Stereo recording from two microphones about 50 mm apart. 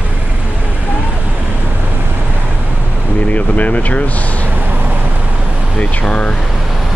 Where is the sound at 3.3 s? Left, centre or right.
Left.